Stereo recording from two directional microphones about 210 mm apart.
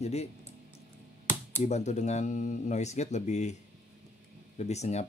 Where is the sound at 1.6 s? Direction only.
35° left (ahead or behind).